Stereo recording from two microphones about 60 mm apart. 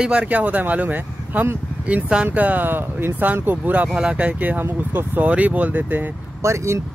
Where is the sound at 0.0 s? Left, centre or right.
Centre.